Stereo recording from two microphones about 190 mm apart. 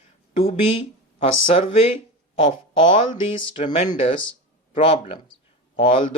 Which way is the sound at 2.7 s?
25° left (ahead or behind).